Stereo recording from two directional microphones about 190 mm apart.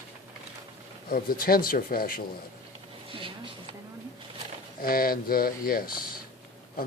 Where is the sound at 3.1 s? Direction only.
25° right (ahead or behind).